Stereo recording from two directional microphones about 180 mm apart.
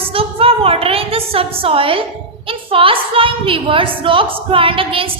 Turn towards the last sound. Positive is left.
turn(degrees=-30)  # may be behind; listen again after turning